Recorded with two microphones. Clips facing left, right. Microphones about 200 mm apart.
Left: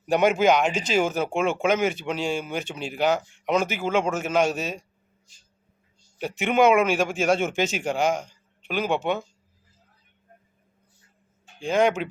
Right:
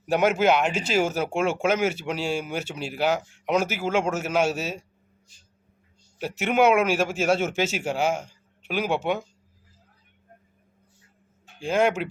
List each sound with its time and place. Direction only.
0.0 s a man's voice: 5° right (ahead or behind)
6.1 s a man's voice: 5° right (ahead or behind)
11.6 s a man's voice: 5° right (ahead or behind)